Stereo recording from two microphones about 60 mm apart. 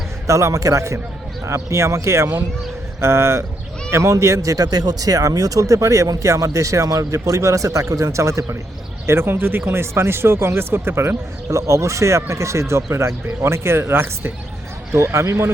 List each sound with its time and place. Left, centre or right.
0.3 s speech: right
1.5 s speech: right
9.0 s speech: right